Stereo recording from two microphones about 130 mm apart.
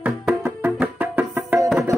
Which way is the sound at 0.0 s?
15° right (ahead or behind).